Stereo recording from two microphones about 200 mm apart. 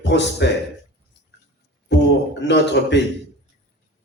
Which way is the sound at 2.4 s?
60° left (ahead or behind).